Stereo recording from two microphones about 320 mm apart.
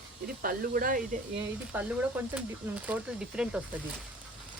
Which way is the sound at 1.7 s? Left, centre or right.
Centre.